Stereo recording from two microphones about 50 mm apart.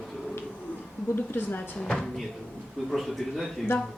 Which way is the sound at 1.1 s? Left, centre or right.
Left.